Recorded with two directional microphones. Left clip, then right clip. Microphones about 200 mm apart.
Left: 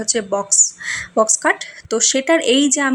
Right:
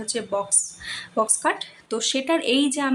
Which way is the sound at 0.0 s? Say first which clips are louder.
Left 6 dB; 25° left (ahead or behind).